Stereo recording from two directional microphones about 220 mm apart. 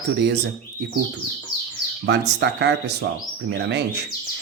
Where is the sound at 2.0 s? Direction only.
50° right (ahead or behind).